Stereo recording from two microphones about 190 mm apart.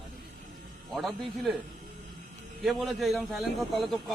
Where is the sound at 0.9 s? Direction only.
Centre (ahead or behind).